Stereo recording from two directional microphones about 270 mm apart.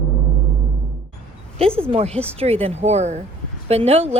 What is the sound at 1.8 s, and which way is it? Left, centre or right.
Speech, right.